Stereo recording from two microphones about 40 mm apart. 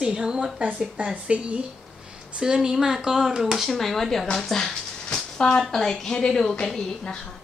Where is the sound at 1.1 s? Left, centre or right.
Right.